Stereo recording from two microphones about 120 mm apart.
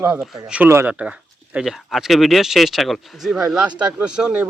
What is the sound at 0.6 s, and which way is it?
Speech, 20° right (ahead or behind).